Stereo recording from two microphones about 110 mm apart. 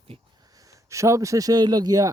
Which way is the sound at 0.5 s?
30° right (ahead or behind).